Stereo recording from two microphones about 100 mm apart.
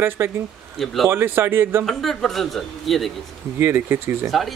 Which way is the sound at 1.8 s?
Centre (ahead or behind).